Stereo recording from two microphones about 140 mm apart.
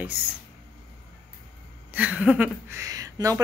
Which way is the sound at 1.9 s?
10° right (ahead or behind).